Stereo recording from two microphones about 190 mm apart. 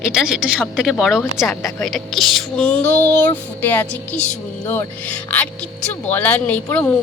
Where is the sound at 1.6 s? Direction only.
15° left (ahead or behind).